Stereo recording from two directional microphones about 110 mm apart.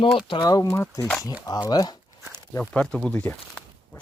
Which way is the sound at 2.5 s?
10° left (ahead or behind).